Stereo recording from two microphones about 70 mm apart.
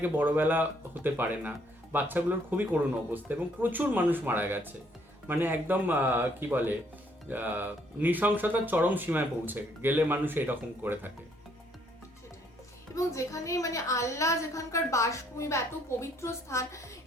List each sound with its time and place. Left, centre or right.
0.0 s speech: right
13.1 s a woman's voice: left